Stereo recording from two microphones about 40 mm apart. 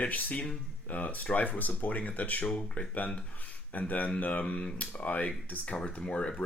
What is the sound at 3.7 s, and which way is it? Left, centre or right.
Speech, left.